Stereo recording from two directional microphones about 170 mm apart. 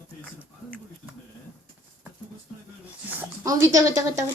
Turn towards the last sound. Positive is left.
turn(degrees=-20)  # may be behind; listen again after turning